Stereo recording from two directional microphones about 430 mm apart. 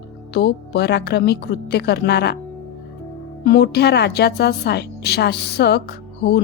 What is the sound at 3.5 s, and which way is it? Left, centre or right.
Speech, left.